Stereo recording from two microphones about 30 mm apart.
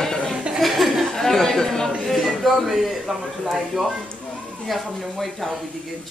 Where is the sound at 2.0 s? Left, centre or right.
Centre.